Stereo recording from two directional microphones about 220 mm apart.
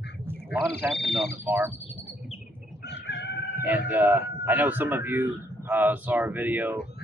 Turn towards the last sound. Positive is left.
turn(degrees=-10)  # may be behind; listen again after turning